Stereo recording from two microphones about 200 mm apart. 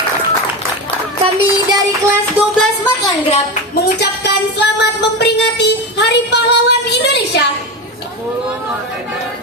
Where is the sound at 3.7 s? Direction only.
55° left (ahead or behind).